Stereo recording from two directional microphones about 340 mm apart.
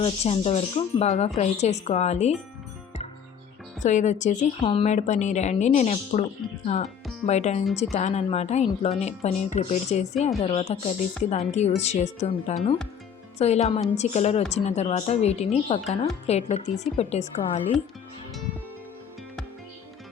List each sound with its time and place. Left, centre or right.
0.0 s a woman's voice: centre
3.8 s a woman's voice: left